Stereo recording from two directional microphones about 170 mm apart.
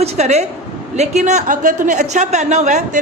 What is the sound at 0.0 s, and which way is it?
A man's voice, 40° right (ahead or behind).